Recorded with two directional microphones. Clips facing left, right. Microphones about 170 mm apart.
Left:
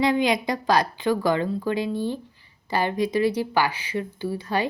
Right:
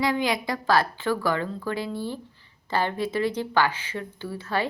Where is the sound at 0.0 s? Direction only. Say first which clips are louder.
Left 4 dB; 20° left (ahead or behind).